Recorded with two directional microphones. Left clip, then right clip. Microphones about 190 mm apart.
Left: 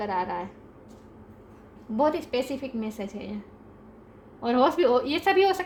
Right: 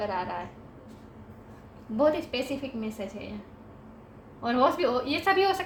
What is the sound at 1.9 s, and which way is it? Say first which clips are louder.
A woman's voice: left 1 dB; 55° left (ahead or behind).